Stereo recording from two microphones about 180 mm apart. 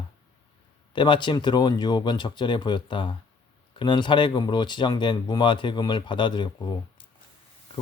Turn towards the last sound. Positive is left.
turn(degrees=25)  # may be behind; listen again after turning